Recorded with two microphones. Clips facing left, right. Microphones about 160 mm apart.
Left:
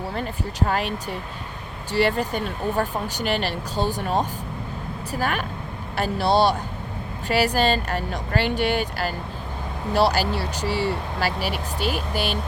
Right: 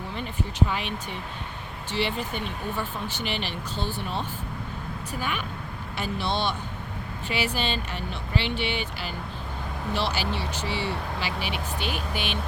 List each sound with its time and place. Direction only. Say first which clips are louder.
0.7 s speech: left 6 dB; 40° left (ahead or behind)